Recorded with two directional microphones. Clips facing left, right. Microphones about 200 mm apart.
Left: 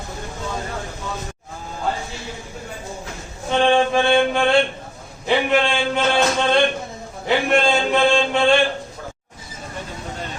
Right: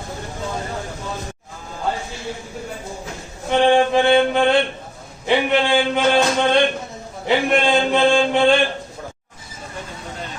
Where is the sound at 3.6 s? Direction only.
15° right (ahead or behind).